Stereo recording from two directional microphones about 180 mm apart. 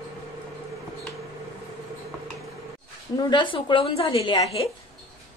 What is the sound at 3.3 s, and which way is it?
A woman's voice, 25° left (ahead or behind).